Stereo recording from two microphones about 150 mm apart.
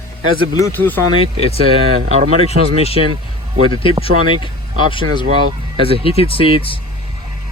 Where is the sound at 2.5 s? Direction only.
90° right.